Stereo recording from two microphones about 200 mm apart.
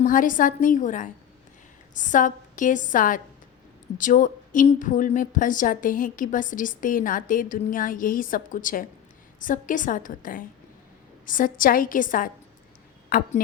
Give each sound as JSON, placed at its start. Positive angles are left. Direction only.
{"t": 0.0, "sound": "a woman's voice", "side_deg": 40}